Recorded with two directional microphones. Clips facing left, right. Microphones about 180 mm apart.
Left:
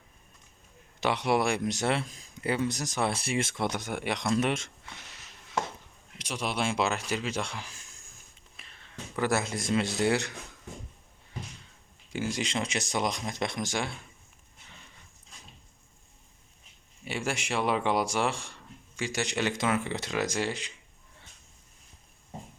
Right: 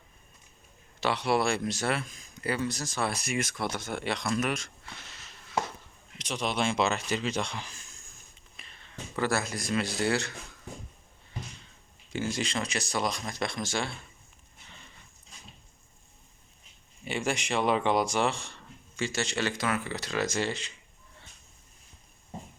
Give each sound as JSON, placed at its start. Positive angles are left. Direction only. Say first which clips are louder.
{"t": 1.0, "sound": "speech", "louder": "even", "side_deg": 20}
{"t": 8.6, "sound": "a sound", "louder": "right 1 dB", "side_deg": 5}
{"t": 9.1, "sound": "speech", "louder": "left 1 dB", "side_deg": 20}
{"t": 12.1, "sound": "speech", "louder": "even", "side_deg": 10}
{"t": 17.1, "sound": "speech", "louder": "right 2 dB", "side_deg": 5}